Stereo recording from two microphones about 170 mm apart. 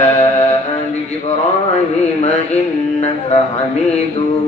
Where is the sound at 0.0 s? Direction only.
40° left (ahead or behind).